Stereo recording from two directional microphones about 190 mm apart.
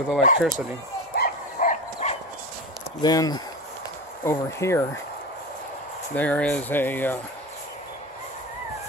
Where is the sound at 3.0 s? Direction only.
20° left (ahead or behind).